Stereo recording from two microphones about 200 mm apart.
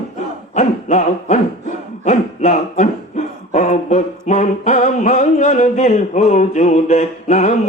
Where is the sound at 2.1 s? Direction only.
40° left (ahead or behind).